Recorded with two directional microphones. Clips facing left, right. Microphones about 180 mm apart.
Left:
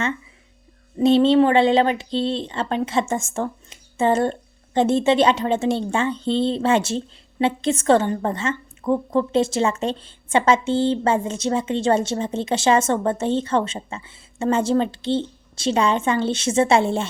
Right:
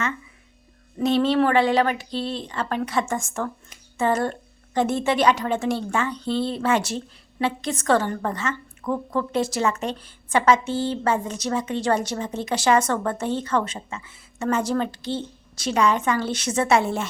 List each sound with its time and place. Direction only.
0.9 s speech: 25° left (ahead or behind)